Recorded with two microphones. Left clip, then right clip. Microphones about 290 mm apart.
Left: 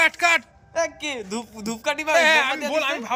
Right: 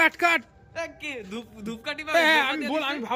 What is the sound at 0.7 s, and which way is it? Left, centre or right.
A woman's voice, centre.